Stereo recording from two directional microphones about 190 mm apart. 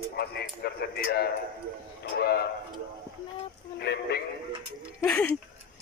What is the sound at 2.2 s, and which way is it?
Tick-tock, 55° left (ahead or behind).